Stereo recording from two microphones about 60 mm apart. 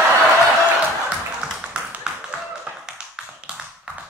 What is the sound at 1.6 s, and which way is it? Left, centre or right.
Tap, centre.